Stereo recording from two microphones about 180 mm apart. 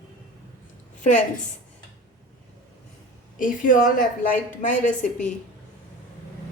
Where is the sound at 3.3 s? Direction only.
50° left (ahead or behind).